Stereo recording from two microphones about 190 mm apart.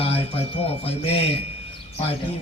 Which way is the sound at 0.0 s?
30° left (ahead or behind).